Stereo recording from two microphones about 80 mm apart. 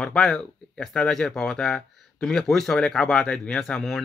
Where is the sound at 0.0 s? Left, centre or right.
Centre.